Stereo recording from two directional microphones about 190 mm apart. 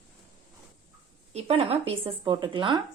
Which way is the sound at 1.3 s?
30° right (ahead or behind).